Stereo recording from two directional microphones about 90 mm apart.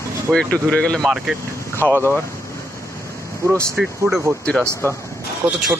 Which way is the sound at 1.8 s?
20° left (ahead or behind).